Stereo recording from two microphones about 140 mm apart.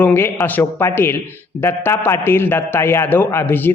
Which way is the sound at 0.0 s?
15° left (ahead or behind).